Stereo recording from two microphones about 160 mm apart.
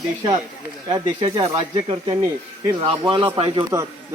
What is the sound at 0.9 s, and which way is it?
Speech, 30° right (ahead or behind).